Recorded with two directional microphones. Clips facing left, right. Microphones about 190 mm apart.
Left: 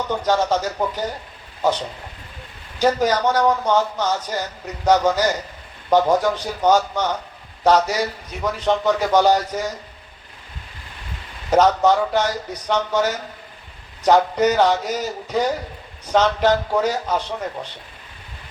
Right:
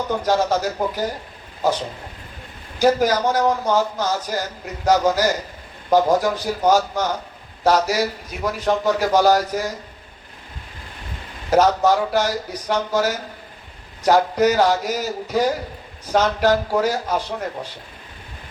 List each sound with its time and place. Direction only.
0.1 s speech: 10° right (ahead or behind)
2.7 s speech: 10° right (ahead or behind)
11.5 s speech: 10° right (ahead or behind)